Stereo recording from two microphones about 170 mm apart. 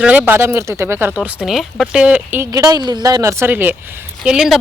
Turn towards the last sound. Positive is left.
turn(degrees=-5)  # may be behind; listen again after turning